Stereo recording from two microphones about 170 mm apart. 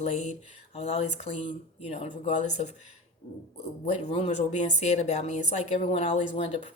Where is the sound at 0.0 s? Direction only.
40° left (ahead or behind).